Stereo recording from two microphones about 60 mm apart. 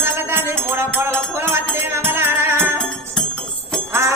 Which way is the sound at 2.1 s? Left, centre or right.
Right.